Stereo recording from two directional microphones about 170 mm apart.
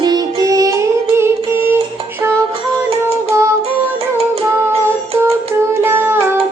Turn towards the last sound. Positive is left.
turn(degrees=-15)  # may be behind; listen again after turning